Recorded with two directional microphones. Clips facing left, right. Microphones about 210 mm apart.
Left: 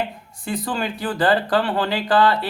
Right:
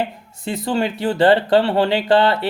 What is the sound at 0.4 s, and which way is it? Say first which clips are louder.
Speech: right 4 dB; 25° right (ahead or behind).